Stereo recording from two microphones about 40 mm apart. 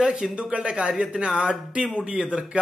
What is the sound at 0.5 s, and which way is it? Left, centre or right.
Speech, right.